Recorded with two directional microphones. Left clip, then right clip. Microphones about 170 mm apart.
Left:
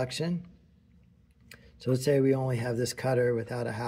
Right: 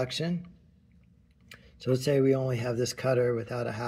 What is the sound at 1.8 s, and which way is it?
Speech, 5° left (ahead or behind).